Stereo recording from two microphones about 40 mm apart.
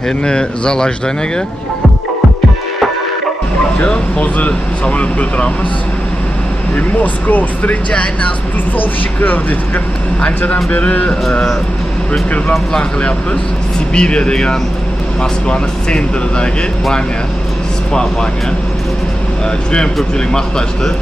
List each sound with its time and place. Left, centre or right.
0.2 s speech: left
3.8 s speech: left
6.7 s speech: left
8.7 s speech: left
10.4 s speech: left
13.9 s speech: left
20.3 s speech: centre